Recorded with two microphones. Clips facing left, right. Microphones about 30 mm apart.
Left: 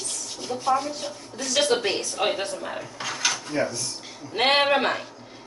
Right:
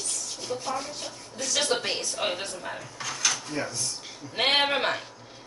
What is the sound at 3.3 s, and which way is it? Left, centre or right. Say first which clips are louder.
Dishes: left 4 dB; centre.